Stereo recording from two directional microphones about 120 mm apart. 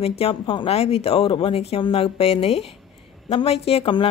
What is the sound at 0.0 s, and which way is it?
Speech, 55° left (ahead or behind).